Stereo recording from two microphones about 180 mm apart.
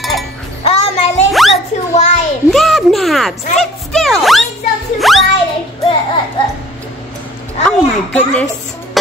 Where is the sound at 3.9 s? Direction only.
Centre (ahead or behind).